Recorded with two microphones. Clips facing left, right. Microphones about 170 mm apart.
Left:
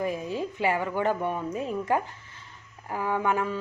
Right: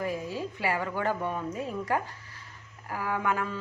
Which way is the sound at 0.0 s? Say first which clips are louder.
Left 3 dB; 20° left (ahead or behind).